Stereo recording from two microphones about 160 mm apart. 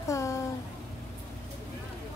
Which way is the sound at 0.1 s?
20° left (ahead or behind).